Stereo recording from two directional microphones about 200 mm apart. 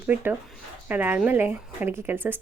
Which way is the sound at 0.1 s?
10° right (ahead or behind).